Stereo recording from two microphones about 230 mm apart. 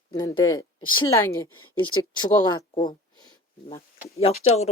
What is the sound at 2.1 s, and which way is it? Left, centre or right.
Speech, centre.